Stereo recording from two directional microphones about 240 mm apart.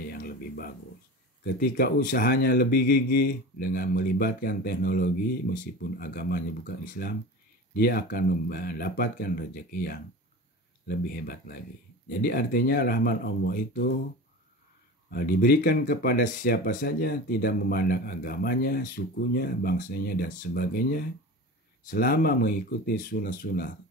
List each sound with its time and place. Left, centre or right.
0.1 s a sound: left
1.4 s speech: left
15.0 s speech: left